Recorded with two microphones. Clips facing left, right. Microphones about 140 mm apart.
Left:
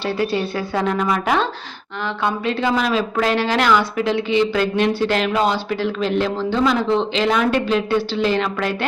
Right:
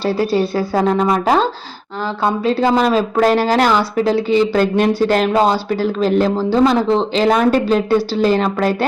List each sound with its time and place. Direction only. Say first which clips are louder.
0.0 s a woman's voice: right 5 dB; 40° right (ahead or behind)